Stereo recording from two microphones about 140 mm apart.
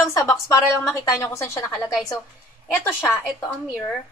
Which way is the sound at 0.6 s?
5° right (ahead or behind).